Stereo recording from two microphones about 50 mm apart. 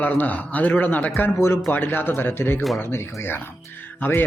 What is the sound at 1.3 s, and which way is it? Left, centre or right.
Speech, left.